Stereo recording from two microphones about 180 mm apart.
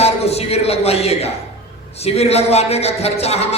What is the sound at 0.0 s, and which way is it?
A man's voice, 35° left (ahead or behind).